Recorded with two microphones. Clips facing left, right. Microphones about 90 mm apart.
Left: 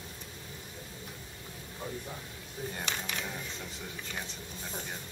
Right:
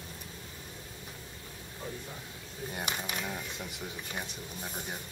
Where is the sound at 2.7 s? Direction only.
15° right (ahead or behind).